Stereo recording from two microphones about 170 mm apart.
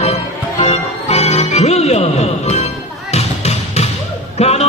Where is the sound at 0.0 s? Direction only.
40° left (ahead or behind).